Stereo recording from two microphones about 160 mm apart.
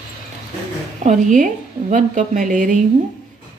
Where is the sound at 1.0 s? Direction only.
50° right (ahead or behind).